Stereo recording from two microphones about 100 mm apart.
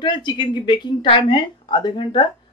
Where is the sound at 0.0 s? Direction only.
45° left (ahead or behind).